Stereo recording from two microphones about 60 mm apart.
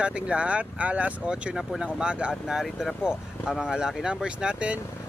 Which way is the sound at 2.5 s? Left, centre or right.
Centre.